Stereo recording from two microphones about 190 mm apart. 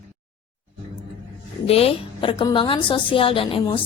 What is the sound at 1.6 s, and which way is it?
A woman's voice, 30° left (ahead or behind).